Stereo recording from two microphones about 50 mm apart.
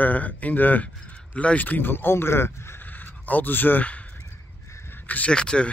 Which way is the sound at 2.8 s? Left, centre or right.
Left.